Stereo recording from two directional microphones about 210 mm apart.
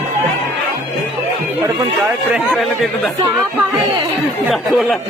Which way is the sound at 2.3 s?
Centre (ahead or behind).